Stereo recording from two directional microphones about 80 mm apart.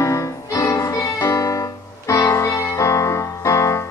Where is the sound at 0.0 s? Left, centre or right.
Left.